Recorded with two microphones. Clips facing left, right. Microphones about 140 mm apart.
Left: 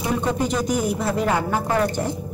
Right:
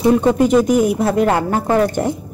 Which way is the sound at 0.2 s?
55° right (ahead or behind).